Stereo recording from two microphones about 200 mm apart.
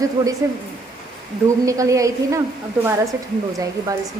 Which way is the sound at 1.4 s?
15° right (ahead or behind).